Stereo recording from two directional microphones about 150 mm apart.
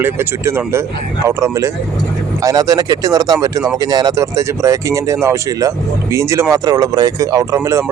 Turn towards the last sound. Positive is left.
turn(degrees=-20)  # may be behind; listen again after turning